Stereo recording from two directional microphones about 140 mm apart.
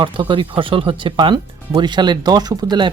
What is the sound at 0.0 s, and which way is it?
Speech, 35° right (ahead or behind).